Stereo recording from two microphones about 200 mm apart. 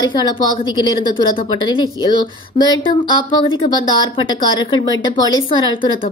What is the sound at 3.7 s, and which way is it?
A woman's voice, 25° left (ahead or behind).